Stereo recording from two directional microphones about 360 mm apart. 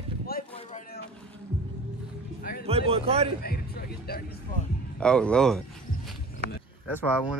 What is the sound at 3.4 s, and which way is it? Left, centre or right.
Speech, left.